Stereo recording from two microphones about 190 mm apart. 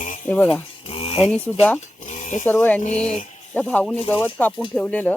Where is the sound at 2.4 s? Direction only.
10° left (ahead or behind).